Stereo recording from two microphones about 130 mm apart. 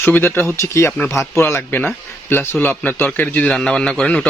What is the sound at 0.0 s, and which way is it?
A man's voice, 15° left (ahead or behind).